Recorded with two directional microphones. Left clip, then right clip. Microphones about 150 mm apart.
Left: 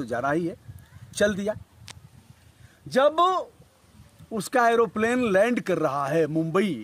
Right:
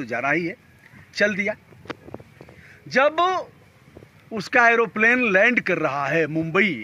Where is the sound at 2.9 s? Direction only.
25° left (ahead or behind).